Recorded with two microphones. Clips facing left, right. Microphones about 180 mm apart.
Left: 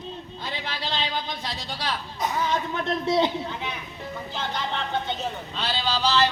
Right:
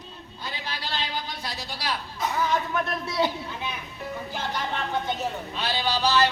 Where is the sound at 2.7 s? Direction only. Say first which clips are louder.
Left 4 dB; 25° left (ahead or behind).